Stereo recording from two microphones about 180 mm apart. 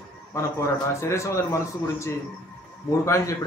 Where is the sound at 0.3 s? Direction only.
15° left (ahead or behind).